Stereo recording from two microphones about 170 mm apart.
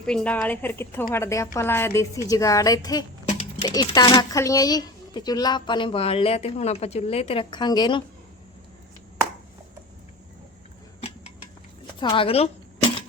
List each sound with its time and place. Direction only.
0.0 s a woman's voice: 5° left (ahead or behind); by 8.0 s 25° left (ahead or behind)
11.9 s a woman's voice: 30° left (ahead or behind)